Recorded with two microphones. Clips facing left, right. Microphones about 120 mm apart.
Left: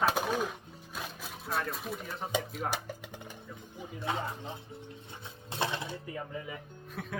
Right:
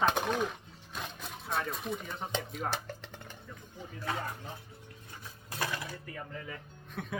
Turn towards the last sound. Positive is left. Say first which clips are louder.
# right 1 dB
turn(degrees=0)  # may be behind; listen again after turning